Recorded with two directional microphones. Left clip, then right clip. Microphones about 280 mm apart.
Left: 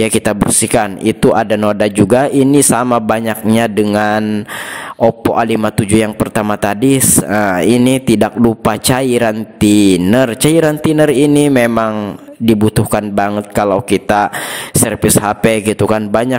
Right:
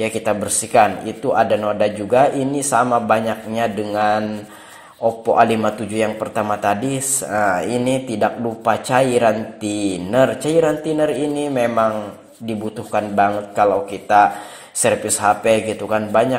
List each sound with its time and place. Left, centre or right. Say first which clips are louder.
0.0 s speech: left 6 dB; left
5.3 s speech: left 1 dB; left